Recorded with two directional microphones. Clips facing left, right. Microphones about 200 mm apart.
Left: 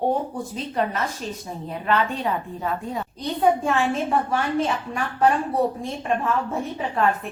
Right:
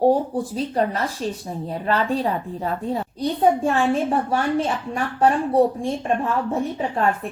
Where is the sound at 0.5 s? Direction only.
35° right (ahead or behind).